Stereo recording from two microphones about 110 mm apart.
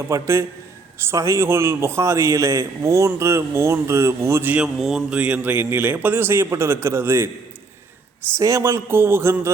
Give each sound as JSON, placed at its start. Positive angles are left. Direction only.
{"t": 0.1, "sound": "a man's voice", "side_deg": -25}
{"t": 4.5, "sound": "a man's voice", "side_deg": -5}
{"t": 8.4, "sound": "a man's voice", "side_deg": -30}